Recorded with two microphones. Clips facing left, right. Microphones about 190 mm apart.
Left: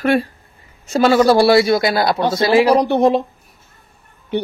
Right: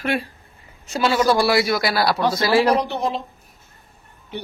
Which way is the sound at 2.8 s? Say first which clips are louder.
Left 10 dB; 60° left (ahead or behind).